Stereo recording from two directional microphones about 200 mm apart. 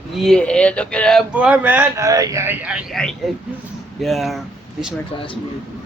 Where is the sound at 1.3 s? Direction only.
5° right (ahead or behind).